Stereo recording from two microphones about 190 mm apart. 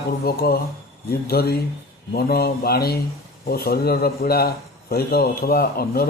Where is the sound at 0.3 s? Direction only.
50° left (ahead or behind).